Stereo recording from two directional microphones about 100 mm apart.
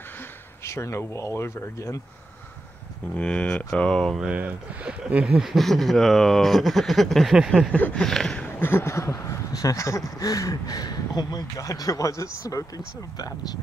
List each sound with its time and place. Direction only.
0.7 s speech: 25° left (ahead or behind)
3.2 s speech: 10° left (ahead or behind)
4.2 s speech: 10° right (ahead or behind)
7.7 s speech: 15° left (ahead or behind)
8.0 s speech: 5° left (ahead or behind)
8.5 s speech: 25° left (ahead or behind); by 13.6 s 40° left (ahead or behind)